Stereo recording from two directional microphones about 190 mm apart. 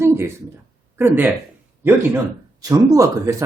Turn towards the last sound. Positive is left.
turn(degrees=-15)  # may be behind; listen again after turning